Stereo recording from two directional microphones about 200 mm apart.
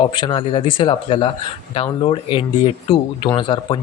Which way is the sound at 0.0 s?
20° left (ahead or behind).